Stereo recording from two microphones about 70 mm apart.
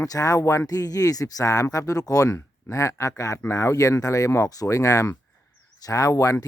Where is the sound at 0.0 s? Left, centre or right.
Left.